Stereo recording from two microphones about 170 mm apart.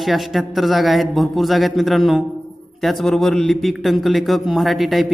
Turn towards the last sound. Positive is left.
turn(degrees=0)  # may be behind; listen again after turning